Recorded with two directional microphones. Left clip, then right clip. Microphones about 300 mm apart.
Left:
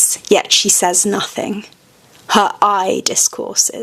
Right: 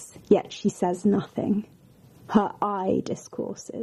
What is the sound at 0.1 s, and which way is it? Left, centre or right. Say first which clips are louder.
Speech: left 7 dB; centre.